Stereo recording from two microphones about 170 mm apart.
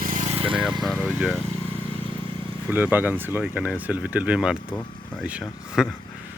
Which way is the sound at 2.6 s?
10° right (ahead or behind).